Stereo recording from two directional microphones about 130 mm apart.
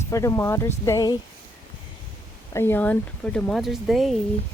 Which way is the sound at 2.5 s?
15° left (ahead or behind).